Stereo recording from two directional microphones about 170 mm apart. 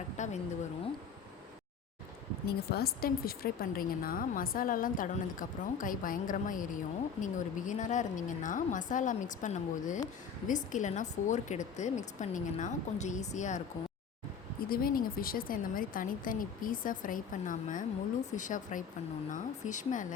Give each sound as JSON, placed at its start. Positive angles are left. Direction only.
{"t": 0.2, "sound": "a sound", "side_deg": 45}
{"t": 2.5, "sound": "a woman's voice", "side_deg": 65}
{"t": 14.7, "sound": "speech", "side_deg": 60}